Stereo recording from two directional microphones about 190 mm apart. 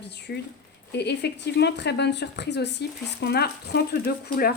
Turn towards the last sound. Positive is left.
turn(degrees=50)  # may be behind; listen again after turning